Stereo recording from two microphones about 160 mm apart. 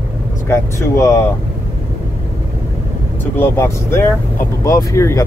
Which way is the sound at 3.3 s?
15° left (ahead or behind).